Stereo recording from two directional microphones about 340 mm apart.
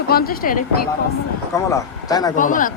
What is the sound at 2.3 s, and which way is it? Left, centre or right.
Speech, left.